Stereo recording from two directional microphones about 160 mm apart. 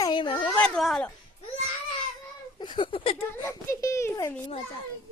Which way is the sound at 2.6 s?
30° left (ahead or behind).